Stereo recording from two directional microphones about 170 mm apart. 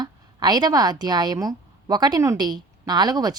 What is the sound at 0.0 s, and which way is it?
A woman's voice, 25° right (ahead or behind).